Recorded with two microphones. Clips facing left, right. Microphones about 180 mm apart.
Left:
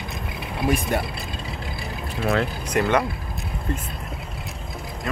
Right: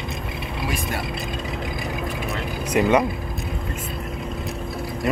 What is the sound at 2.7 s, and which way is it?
Speech, 10° right (ahead or behind).